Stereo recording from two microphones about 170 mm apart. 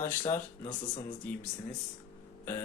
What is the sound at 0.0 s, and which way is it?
Speech, 15° left (ahead or behind).